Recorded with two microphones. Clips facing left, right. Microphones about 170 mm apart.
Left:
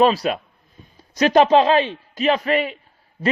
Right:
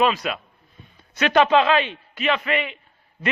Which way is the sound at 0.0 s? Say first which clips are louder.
Left 5 dB; 35° left (ahead or behind).